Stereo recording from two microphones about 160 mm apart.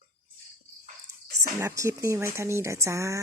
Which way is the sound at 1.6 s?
20° right (ahead or behind).